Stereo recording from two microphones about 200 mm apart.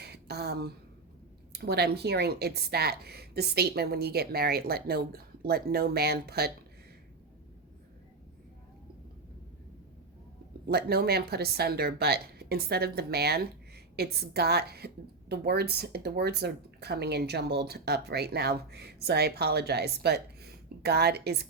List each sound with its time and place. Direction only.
0.0 s a sound: 55° right (ahead or behind)
1.5 s speech: 55° right (ahead or behind)
10.7 s speech: 50° right (ahead or behind)